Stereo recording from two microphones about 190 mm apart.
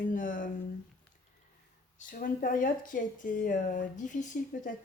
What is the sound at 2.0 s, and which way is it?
Speech, 45° left (ahead or behind).